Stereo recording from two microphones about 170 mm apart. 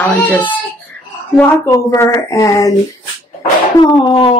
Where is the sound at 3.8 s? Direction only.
30° left (ahead or behind).